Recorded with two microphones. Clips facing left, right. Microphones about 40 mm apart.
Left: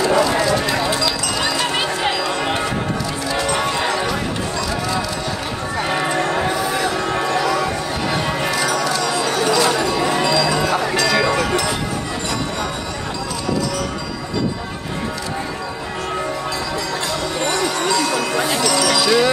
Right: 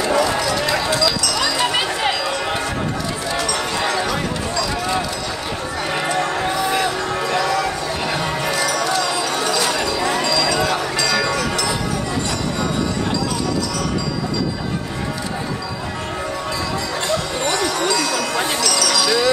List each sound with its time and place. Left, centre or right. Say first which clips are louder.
0.8 s clip-clop: right 1 dB; left
3.3 s basketball bounce: left 3 dB; left
6.1 s a sound: left 1 dB; centre
11.0 s music: left 4 dB; centre
17.6 s a sound: even; left
18.6 s music: left 3 dB; left